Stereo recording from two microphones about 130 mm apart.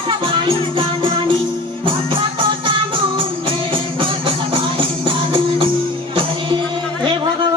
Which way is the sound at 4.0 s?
40° right (ahead or behind).